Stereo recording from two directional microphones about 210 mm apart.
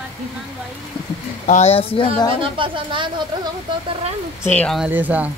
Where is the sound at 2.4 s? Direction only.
25° right (ahead or behind).